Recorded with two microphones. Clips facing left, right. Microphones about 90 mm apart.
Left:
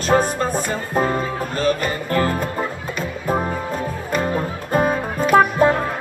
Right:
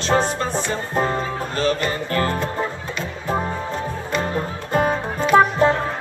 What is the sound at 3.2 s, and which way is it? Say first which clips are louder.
Music: left 2 dB; 10° left (ahead or behind).